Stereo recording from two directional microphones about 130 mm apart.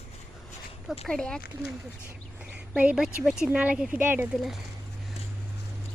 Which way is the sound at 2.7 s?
5° right (ahead or behind).